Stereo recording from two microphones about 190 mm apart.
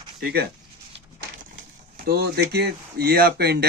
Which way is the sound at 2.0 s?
55° right (ahead or behind).